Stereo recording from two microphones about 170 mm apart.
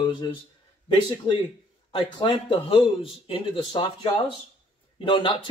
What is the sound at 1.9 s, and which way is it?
Speech, 30° left (ahead or behind).